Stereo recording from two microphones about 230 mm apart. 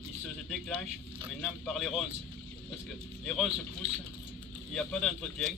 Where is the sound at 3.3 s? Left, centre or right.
Centre.